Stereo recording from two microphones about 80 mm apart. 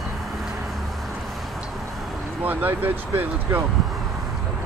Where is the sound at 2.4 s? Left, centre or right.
Right.